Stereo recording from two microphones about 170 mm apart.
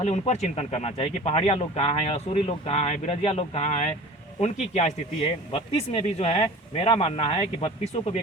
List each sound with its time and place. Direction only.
0.0 s speech: 40° left (ahead or behind)